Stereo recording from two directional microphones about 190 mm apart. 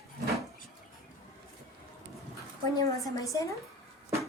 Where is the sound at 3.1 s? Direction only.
15° left (ahead or behind).